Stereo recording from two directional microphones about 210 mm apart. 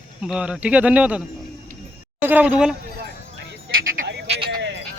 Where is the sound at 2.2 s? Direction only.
10° right (ahead or behind).